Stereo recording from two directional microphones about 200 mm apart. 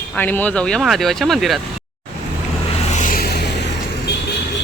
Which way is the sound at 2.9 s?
40° left (ahead or behind).